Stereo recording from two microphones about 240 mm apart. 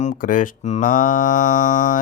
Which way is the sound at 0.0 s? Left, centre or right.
Left.